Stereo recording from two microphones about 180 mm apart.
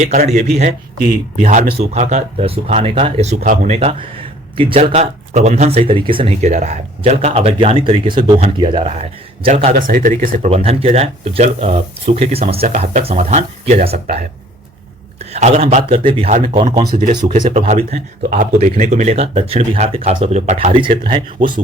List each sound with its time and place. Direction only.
0.1 s speech: 45° right (ahead or behind)
10.5 s speech: 30° right (ahead or behind)
15.2 s speech: 35° right (ahead or behind)